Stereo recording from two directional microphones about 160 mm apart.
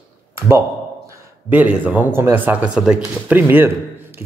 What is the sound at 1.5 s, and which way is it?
Speech, 10° right (ahead or behind).